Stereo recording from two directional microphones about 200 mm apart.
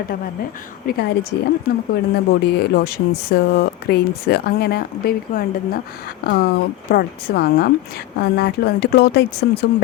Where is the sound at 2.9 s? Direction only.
50° left (ahead or behind).